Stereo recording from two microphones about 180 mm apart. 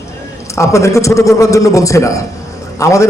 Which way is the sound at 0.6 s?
15° left (ahead or behind).